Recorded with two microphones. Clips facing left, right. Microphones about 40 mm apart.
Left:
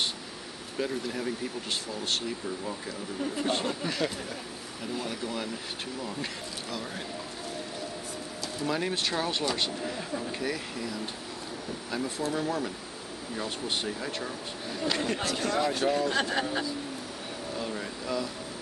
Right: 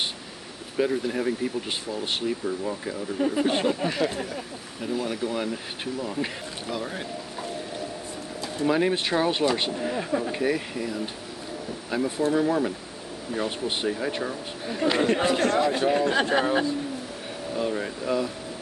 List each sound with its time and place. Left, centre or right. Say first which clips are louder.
0.7 s speech: right 7 dB; centre
8.6 s speech: right 7 dB; centre
15.3 s a man's voice: right 6 dB; right
15.9 s speech: right 5 dB; centre
17.6 s speech: right 9 dB; centre